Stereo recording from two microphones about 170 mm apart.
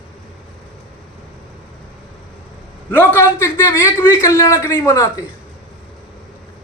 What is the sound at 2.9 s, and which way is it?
Speech, 15° left (ahead or behind).